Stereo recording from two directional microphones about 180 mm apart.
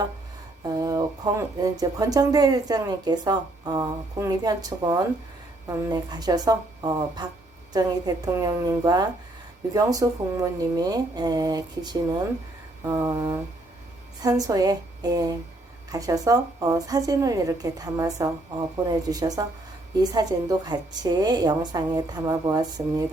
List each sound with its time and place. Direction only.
0.6 s speech: 20° right (ahead or behind)